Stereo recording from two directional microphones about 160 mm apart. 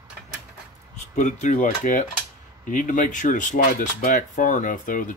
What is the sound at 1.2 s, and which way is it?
Speech, 45° left (ahead or behind).